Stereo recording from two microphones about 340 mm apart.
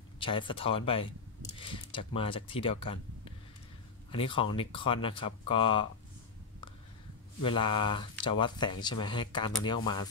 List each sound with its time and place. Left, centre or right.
0.2 s speech: centre
7.4 s speech: centre